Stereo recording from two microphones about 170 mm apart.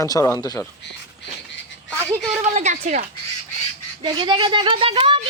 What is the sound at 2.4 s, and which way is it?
Speech, 45° right (ahead or behind).